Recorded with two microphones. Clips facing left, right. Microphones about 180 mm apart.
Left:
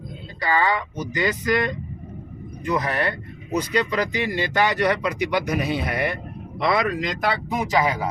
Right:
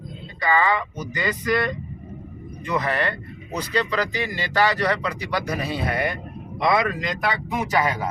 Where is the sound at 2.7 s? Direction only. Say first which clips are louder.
Right 1 dB; 10° left (ahead or behind).